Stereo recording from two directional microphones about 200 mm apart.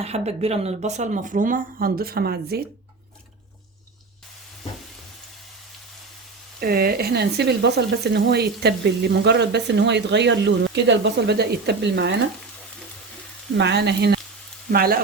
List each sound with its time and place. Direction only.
0.0 s speech: 30° right (ahead or behind); by 2.6 s 50° right (ahead or behind)
6.6 s speech: 50° right (ahead or behind)
13.6 s speech: 60° right (ahead or behind)
14.7 s frying: 50° right (ahead or behind)